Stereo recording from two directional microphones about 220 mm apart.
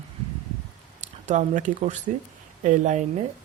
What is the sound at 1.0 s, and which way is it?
Speech, 35° right (ahead or behind).